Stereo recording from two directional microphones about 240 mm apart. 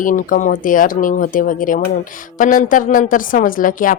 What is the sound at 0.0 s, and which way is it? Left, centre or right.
A woman's voice, left.